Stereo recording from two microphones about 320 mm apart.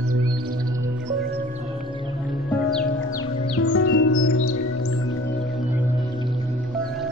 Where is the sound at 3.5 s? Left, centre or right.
Left.